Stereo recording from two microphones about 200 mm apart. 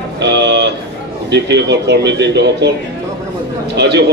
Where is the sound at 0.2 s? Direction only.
60° right (ahead or behind).